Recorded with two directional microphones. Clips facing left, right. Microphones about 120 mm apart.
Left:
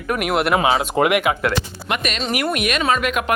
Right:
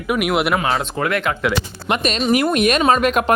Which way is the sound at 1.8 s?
30° right (ahead or behind).